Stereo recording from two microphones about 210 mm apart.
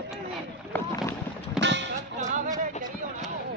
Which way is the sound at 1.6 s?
60° right (ahead or behind).